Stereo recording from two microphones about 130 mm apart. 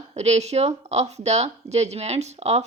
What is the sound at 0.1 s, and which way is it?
Speech, 55° right (ahead or behind).